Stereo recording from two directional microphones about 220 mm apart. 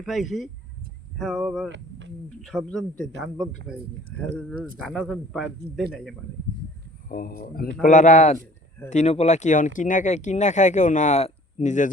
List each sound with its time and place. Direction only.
0.0 s speech: centre (ahead or behind)
2.6 s speech: 5° left (ahead or behind)
7.1 s speech: 40° left (ahead or behind)